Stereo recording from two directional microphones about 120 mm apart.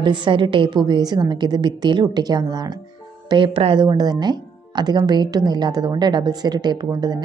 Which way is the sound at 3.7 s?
35° right (ahead or behind).